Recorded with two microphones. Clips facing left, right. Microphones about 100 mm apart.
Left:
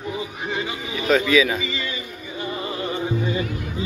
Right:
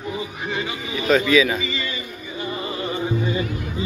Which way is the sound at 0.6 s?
10° left (ahead or behind).